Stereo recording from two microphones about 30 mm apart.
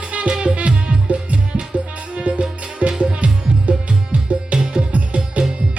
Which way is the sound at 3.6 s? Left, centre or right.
Right.